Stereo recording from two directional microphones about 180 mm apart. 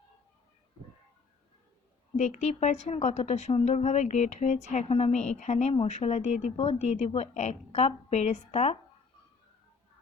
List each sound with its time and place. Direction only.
2.1 s a woman's voice: 40° left (ahead or behind)